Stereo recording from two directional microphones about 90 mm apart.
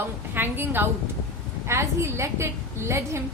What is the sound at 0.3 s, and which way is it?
A woman's voice, 20° right (ahead or behind).